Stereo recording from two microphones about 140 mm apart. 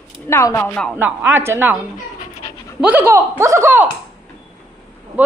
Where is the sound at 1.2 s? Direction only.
20° right (ahead or behind).